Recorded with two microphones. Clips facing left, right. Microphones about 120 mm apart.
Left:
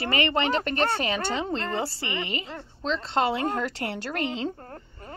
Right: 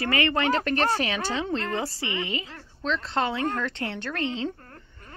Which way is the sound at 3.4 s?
10° left (ahead or behind).